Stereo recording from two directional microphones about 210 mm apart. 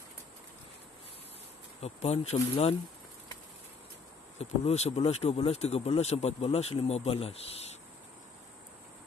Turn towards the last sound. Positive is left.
turn(degrees=30)  # may be behind; listen again after turning